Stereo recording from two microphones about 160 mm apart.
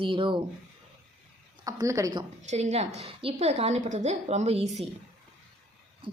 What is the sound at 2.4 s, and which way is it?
A woman's voice, 45° right (ahead or behind).